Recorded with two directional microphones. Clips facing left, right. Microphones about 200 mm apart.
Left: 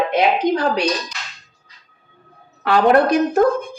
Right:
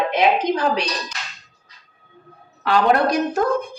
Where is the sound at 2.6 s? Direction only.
55° left (ahead or behind).